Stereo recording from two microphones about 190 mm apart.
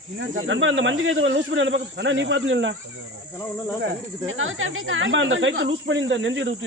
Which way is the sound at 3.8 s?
90° right.